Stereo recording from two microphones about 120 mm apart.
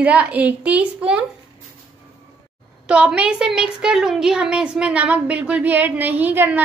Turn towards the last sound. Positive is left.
turn(degrees=-15)  # may be behind; listen again after turning